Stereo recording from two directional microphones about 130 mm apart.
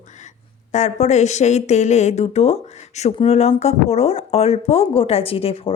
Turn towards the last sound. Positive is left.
turn(degrees=45)  # may be behind; listen again after turning